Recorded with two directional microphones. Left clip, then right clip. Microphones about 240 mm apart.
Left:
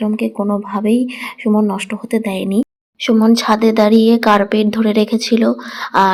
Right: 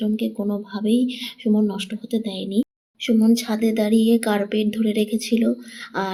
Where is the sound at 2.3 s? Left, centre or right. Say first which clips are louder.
Left 7 dB; left.